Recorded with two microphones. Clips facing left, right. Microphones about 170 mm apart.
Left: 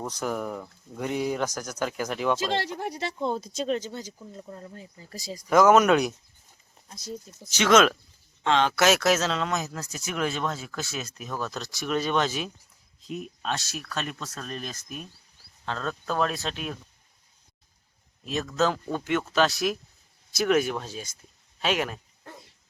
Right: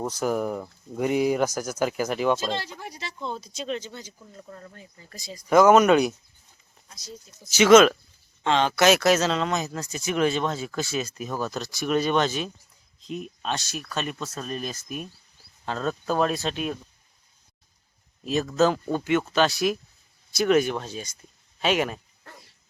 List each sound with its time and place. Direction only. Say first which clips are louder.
0.1 s speech: right 4 dB; 5° right (ahead or behind)
2.4 s speech: left 2 dB; 70° left (ahead or behind); by 4.1 s 40° left (ahead or behind)
4.2 s speech: left 2 dB; 15° left (ahead or behind)
5.1 s speech: left 4 dB; 40° left (ahead or behind)
5.5 s speech: right 2 dB; centre (ahead or behind)
7.5 s speech: right 5 dB; 5° right (ahead or behind)
18.5 s speech: right 3 dB; centre (ahead or behind)
22.2 s a sound: left 3 dB; 20° left (ahead or behind)